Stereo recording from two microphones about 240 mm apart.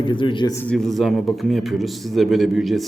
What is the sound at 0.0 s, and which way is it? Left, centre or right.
Speech, centre.